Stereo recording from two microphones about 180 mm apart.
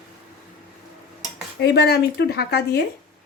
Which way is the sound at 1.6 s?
65° left (ahead or behind).